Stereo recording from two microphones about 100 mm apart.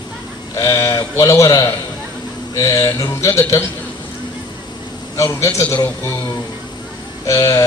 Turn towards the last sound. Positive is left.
turn(degrees=35)  # may be behind; listen again after turning